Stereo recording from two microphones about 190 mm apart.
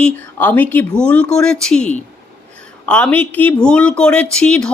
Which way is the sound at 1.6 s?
5° left (ahead or behind).